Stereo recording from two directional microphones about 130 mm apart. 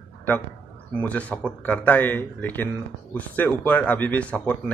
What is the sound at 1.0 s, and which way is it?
Speech, 10° left (ahead or behind).